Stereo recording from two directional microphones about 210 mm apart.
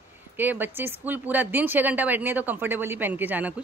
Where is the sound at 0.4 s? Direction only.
10° right (ahead or behind).